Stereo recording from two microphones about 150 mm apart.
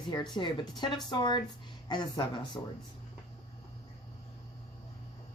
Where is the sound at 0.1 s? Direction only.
30° left (ahead or behind).